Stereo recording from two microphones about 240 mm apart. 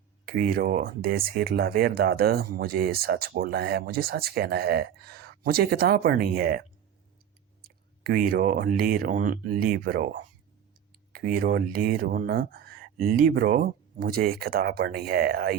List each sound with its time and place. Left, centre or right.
0.3 s speech: right